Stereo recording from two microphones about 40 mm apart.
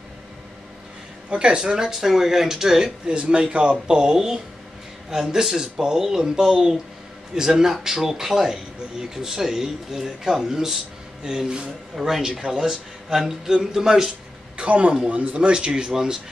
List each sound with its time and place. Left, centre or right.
1.3 s a man's voice: right
3.1 s a man's voice: right
11.9 s a man's voice: centre
14.6 s a man's voice: right; by 16.2 s centre